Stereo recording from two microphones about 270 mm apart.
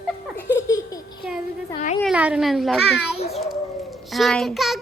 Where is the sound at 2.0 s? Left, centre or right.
Centre.